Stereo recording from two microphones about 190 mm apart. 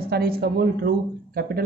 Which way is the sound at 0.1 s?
55° right (ahead or behind).